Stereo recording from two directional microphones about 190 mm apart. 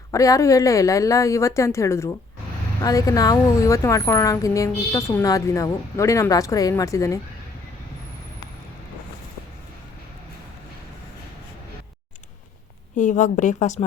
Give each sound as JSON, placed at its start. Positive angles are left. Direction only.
{"t": 0.1, "sound": "a woman's voice", "side_deg": 15}
{"t": 13.0, "sound": "a woman's voice", "side_deg": 40}